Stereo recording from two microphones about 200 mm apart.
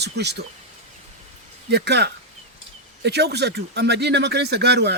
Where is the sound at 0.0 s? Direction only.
55° right (ahead or behind).